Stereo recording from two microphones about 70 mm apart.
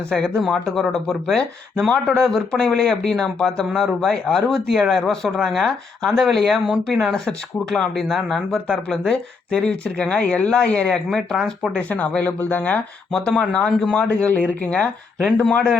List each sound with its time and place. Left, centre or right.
0.1 s speech: centre
11.7 s speech: centre
13.1 s speech: centre
14.3 s speech: left
14.7 s speech: centre